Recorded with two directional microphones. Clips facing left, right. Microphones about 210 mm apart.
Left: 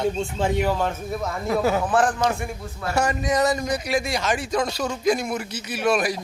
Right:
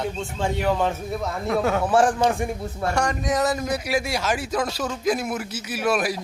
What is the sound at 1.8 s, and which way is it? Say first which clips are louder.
Speech: right 2 dB; 10° right (ahead or behind).